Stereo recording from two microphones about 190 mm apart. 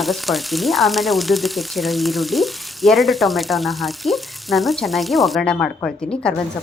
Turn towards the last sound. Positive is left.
turn(degrees=5)  # may be behind; listen again after turning